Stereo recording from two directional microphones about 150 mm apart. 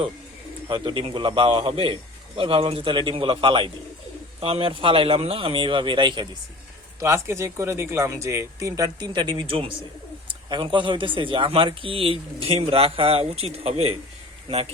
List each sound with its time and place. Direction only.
0.7 s speech: 35° right (ahead or behind)
7.0 s speech: 20° right (ahead or behind); by 14.0 s 40° right (ahead or behind)